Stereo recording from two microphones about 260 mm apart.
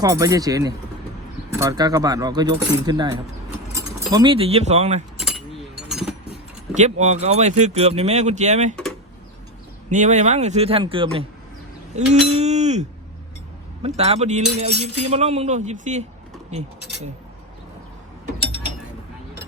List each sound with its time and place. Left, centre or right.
0.0 s speech: centre
5.9 s keys jangling: centre
7.0 s speech: right
9.9 s speech: right